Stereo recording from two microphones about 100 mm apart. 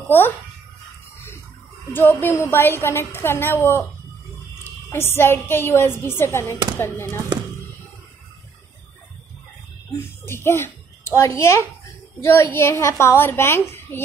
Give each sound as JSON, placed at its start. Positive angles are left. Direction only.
{"t": 1.9, "sound": "a woman's voice", "side_deg": 20}
{"t": 4.8, "sound": "a woman's voice", "side_deg": 25}
{"t": 9.9, "sound": "a child's voice", "side_deg": 25}